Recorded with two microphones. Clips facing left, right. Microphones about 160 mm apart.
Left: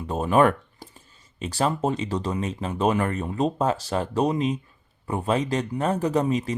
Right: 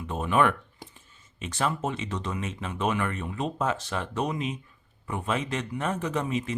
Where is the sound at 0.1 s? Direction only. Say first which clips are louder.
Left 5 dB; 40° left (ahead or behind).